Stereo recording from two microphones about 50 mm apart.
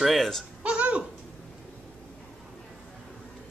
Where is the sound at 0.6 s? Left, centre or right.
Right.